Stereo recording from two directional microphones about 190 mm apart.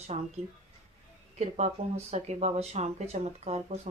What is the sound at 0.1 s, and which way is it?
Speech, 35° right (ahead or behind).